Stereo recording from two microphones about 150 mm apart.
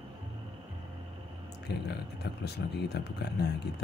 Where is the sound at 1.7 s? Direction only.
90° left.